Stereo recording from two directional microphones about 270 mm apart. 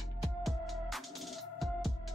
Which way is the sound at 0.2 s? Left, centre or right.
Centre.